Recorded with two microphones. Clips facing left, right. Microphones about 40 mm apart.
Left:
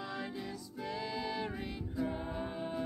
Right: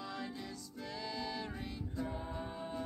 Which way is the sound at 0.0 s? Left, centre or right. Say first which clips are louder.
Left 3 dB; centre.